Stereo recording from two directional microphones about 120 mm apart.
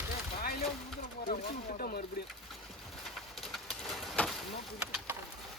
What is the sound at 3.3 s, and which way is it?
Pigeon, centre (ahead or behind).